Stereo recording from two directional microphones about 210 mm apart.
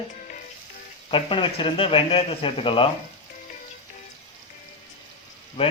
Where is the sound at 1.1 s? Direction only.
25° left (ahead or behind).